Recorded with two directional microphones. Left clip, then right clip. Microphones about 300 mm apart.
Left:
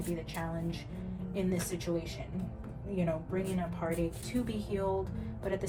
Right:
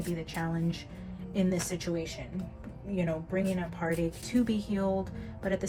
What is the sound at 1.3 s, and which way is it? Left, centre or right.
Speech, right.